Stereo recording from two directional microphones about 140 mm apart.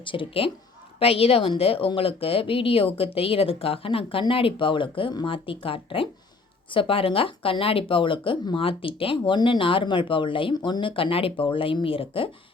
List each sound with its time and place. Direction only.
0.0 s speech: 35° left (ahead or behind)